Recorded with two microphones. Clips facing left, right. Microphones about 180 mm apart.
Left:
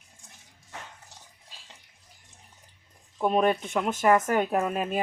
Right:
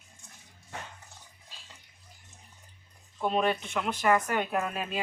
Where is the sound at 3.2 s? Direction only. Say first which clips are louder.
Left 4 dB; 45° left (ahead or behind).